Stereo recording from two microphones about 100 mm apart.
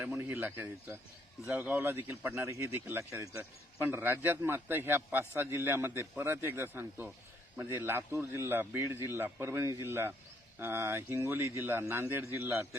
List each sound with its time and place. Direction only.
0.2 s speech: 20° right (ahead or behind)